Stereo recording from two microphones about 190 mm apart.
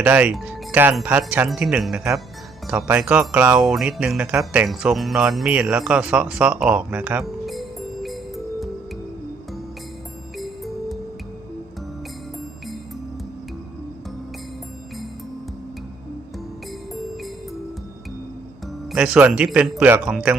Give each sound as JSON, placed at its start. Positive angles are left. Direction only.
{"t": 0.0, "sound": "speech", "side_deg": -5}
{"t": 10.3, "sound": "music", "side_deg": 0}
{"t": 18.9, "sound": "speech", "side_deg": -5}